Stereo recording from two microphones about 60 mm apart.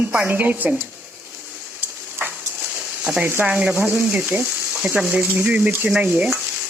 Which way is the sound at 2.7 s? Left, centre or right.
Centre.